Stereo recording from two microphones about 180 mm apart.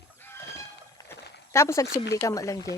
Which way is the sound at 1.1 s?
15° left (ahead or behind).